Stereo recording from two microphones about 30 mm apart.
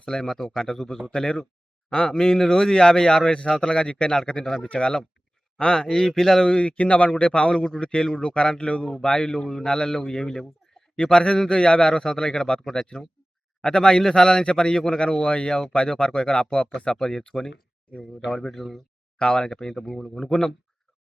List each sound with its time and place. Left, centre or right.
0.1 s a man's voice: centre
1.1 s speech: left
5.5 s speech: left
5.9 s a man's voice: centre
6.6 s a man's voice: left
7.1 s speech: left
8.9 s speech: left
10.9 s speech: left
18.3 s a man's voice: centre
19.2 s a man's voice: left; by 20.5 s centre